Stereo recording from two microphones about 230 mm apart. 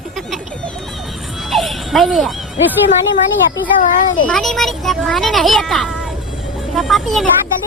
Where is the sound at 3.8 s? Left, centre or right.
Left.